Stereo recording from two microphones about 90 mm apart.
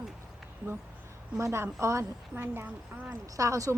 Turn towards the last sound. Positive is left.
turn(degrees=-35)  # may be behind; listen again after turning